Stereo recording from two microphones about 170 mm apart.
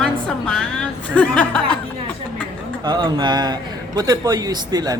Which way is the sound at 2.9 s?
25° right (ahead or behind).